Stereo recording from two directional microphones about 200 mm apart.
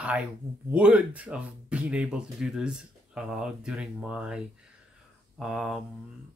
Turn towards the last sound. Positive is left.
turn(degrees=-5)  # may be behind; listen again after turning